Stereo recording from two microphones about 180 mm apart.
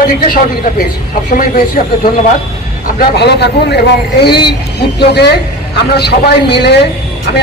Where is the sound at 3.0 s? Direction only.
65° left (ahead or behind).